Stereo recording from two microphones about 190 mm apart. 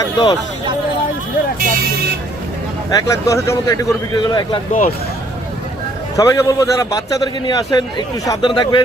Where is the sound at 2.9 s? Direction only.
15° left (ahead or behind).